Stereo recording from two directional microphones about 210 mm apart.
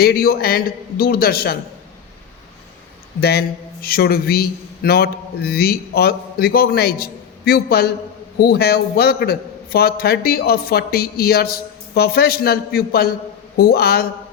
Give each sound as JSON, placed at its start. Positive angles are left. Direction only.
{"t": 0.0, "sound": "a man's voice", "side_deg": 45}
{"t": 3.2, "sound": "a man's voice", "side_deg": 50}